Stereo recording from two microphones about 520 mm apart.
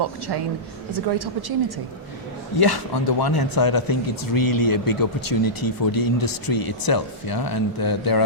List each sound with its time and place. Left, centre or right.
0.0 s a woman's voice: right
2.6 s speech: left